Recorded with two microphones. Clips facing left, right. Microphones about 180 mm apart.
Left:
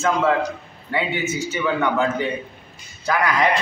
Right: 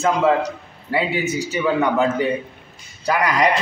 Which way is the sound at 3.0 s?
15° right (ahead or behind).